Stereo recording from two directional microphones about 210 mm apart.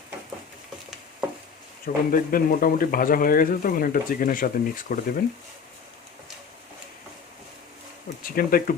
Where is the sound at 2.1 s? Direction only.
45° left (ahead or behind).